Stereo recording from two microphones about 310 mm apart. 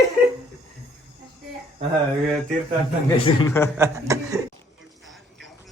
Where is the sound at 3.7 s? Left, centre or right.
Centre.